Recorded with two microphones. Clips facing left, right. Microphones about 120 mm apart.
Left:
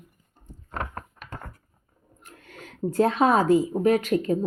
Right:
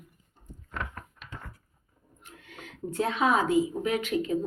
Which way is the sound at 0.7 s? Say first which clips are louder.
Left 5 dB; 45° left (ahead or behind).